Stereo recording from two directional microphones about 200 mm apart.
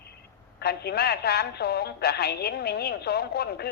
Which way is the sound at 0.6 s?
55° left (ahead or behind).